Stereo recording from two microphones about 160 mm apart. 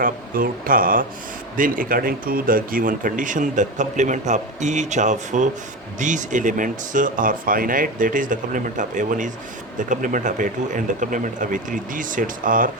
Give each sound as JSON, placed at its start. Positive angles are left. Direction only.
{"t": 0.0, "sound": "speech", "side_deg": -60}